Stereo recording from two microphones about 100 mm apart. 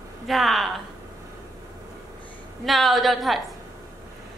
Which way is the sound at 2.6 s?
Centre (ahead or behind).